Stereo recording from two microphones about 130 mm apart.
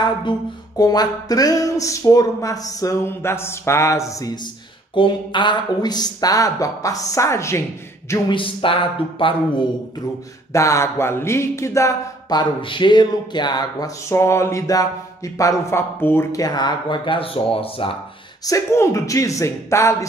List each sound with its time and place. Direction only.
0.7 s speech: 30° left (ahead or behind)
4.9 s speech: 40° left (ahead or behind); by 7.6 s 20° left (ahead or behind)
8.3 s speech: 40° left (ahead or behind)
10.5 s speech: 25° left (ahead or behind); by 17.9 s 45° left (ahead or behind)
18.4 s speech: 25° left (ahead or behind)